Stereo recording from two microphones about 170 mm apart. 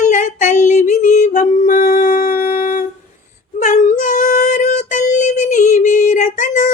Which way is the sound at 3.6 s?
45° left (ahead or behind).